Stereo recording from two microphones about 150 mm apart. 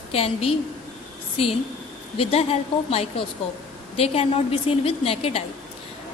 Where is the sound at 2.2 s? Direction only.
40° left (ahead or behind).